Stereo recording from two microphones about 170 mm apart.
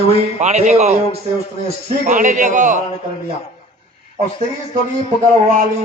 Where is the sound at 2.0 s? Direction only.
45° right (ahead or behind).